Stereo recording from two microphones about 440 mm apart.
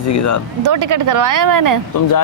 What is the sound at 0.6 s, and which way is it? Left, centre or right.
Speech, right.